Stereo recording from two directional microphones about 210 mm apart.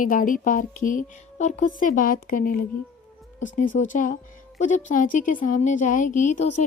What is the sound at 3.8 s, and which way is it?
Speech, 35° left (ahead or behind).